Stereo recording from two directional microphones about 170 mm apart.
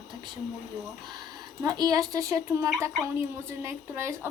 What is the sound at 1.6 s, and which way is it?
A woman's voice, 20° right (ahead or behind).